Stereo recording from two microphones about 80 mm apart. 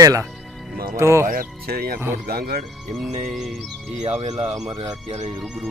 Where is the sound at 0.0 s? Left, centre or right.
Right.